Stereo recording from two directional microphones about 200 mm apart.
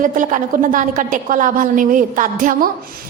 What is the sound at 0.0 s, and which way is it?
A woman's voice, 40° right (ahead or behind).